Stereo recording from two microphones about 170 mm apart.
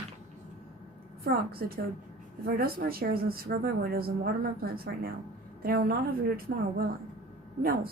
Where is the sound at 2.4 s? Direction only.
60° right (ahead or behind).